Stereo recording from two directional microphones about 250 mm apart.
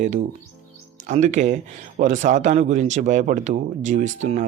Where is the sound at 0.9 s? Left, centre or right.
Right.